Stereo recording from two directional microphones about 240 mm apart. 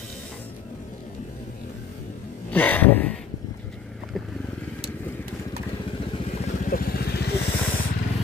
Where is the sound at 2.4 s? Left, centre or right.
Centre.